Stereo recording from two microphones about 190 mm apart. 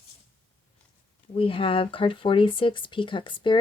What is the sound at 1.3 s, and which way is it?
Speech, 25° left (ahead or behind).